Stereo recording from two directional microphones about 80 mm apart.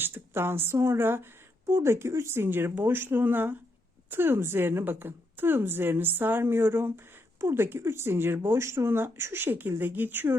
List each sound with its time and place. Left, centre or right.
0.0 s speech: right